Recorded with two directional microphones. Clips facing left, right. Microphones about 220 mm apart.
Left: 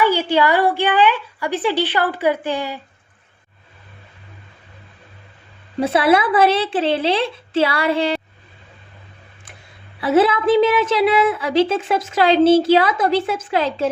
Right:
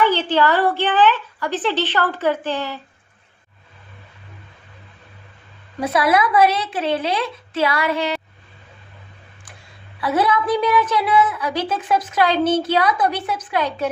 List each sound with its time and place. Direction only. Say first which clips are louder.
0.0 s a woman's voice: left 1 dB; 10° left (ahead or behind)
5.8 s a woman's voice: left 2 dB; 30° left (ahead or behind)
10.0 s a woman's voice: left 4 dB; 25° left (ahead or behind)